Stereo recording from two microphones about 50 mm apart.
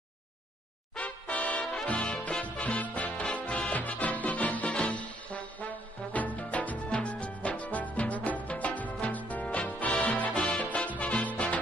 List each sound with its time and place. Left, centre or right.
0.9 s music: left
2.0 s music: centre